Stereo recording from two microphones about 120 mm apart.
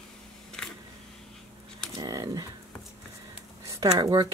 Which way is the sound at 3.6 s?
35° right (ahead or behind).